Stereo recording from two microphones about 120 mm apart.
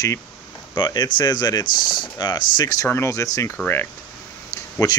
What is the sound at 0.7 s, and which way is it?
Speech, 35° left (ahead or behind).